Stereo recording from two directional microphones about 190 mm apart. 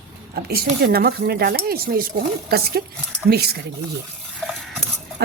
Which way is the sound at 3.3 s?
55° right (ahead or behind).